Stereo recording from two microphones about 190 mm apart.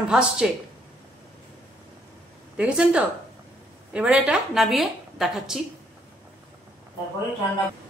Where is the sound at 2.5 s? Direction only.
5° right (ahead or behind).